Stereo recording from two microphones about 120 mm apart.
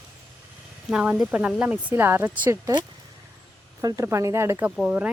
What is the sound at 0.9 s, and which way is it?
Speech, 5° right (ahead or behind).